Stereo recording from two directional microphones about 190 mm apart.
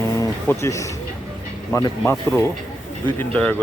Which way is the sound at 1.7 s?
15° left (ahead or behind).